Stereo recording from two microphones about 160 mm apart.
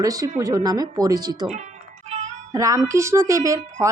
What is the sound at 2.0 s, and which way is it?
Music, 45° right (ahead or behind).